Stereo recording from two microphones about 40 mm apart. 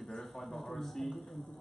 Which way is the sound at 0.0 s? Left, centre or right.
Centre.